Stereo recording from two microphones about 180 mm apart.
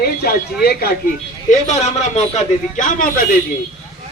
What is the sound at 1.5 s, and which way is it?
A man's voice, 40° left (ahead or behind).